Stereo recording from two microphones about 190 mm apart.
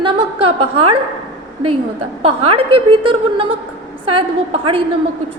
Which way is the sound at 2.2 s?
30° right (ahead or behind).